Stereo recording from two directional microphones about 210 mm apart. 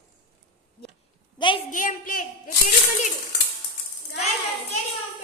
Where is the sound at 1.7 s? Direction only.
40° left (ahead or behind).